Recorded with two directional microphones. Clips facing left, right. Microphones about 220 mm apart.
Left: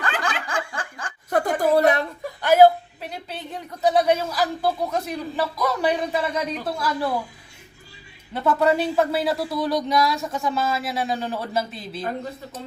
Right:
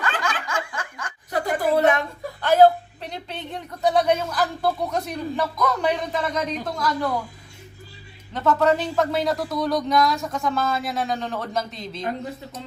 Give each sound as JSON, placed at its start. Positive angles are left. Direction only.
{"t": 0.0, "sound": "snicker", "side_deg": 35}
{"t": 1.3, "sound": "a sound", "side_deg": 40}
{"t": 2.4, "sound": "speech", "side_deg": 10}
{"t": 8.3, "sound": "speech", "side_deg": 10}